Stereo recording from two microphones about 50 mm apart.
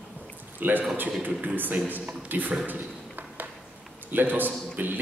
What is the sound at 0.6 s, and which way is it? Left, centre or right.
A man's voice, right.